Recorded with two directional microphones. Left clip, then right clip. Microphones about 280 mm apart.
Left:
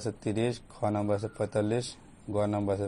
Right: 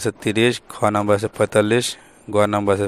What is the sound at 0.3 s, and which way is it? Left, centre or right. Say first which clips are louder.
Speech: right 13 dB; right.